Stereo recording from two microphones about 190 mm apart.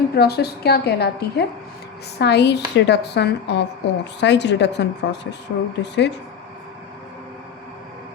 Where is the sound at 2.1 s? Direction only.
60° left (ahead or behind).